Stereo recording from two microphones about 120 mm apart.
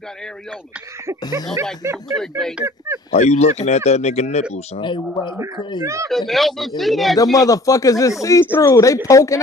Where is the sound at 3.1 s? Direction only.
65° left (ahead or behind).